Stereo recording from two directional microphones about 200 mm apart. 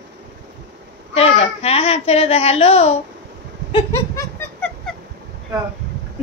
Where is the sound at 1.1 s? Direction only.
30° left (ahead or behind).